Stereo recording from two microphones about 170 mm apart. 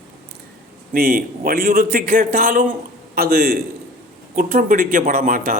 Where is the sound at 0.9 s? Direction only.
60° right (ahead or behind).